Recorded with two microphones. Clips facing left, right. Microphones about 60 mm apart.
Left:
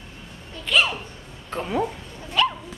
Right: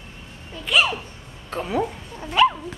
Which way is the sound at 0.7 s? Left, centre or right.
Centre.